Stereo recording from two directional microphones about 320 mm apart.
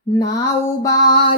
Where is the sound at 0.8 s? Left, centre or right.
Centre.